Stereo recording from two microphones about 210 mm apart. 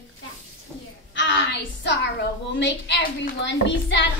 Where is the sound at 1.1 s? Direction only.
60° left (ahead or behind).